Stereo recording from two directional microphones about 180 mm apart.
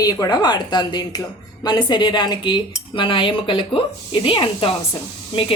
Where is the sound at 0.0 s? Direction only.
20° left (ahead or behind).